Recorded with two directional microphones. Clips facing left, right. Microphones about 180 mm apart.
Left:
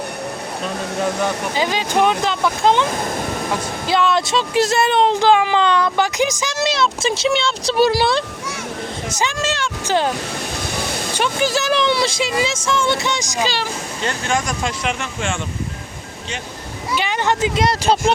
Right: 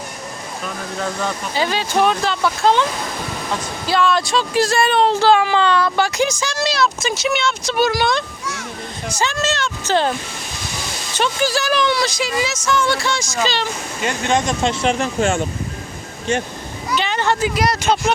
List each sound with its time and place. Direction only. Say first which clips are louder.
0.9 s speech: left 3 dB; 15° left (ahead or behind)
3.8 s speech: even; 20° left (ahead or behind)
9.1 s speech: right 2 dB; 10° left (ahead or behind)
10.8 s waterfall: left 6 dB; 55° left (ahead or behind)
11.2 s speech: right 1 dB; 20° left (ahead or behind)
14.0 s speech: right 3 dB; 20° right (ahead or behind); by 15.4 s 40° right (ahead or behind)
16.9 s speech: even; 10° left (ahead or behind)